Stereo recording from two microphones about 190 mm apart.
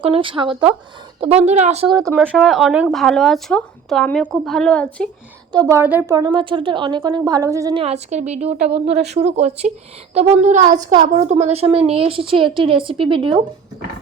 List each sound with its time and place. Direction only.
0.0 s a woman's voice: 30° right (ahead or behind)
2.3 s speech: centre (ahead or behind)
5.5 s a woman's voice: 20° right (ahead or behind)
6.1 s a woman's voice: 25° right (ahead or behind)
7.8 s a woman's voice: 35° right (ahead or behind)